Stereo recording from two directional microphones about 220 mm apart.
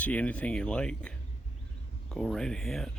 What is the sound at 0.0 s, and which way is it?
Speech, 5° left (ahead or behind).